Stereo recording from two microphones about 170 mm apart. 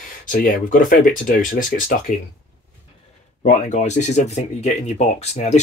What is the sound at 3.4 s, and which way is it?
Speech, 45° left (ahead or behind).